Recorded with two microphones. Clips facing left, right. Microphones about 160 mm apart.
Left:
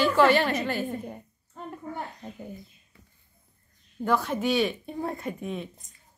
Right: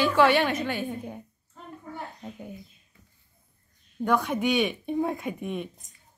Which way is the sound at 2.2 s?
5° right (ahead or behind).